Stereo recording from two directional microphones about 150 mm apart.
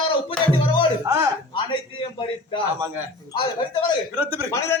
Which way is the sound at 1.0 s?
20° right (ahead or behind).